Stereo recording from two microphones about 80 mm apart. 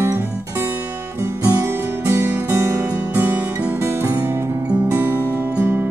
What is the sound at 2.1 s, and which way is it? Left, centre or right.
Music, right.